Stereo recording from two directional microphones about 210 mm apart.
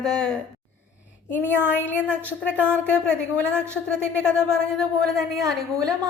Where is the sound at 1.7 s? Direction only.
10° left (ahead or behind).